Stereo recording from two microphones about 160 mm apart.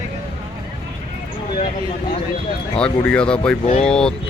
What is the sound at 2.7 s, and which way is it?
Speech, 5° left (ahead or behind).